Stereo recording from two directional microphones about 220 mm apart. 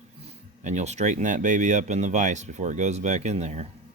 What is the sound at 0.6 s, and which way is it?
Speech, 30° right (ahead or behind).